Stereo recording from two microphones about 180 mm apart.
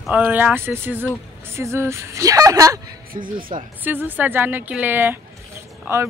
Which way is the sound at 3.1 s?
50° right (ahead or behind).